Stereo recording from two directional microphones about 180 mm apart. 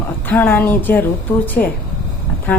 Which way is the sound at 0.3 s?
10° left (ahead or behind).